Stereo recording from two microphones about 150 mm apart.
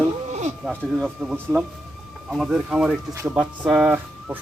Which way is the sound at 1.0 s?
10° right (ahead or behind).